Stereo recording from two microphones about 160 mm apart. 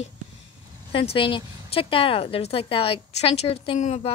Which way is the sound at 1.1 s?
30° left (ahead or behind).